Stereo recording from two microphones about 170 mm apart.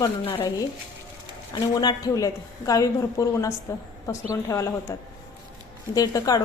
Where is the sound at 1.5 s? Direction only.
25° left (ahead or behind).